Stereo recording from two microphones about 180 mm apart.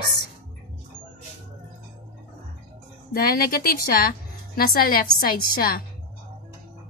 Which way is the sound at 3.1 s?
55° left (ahead or behind).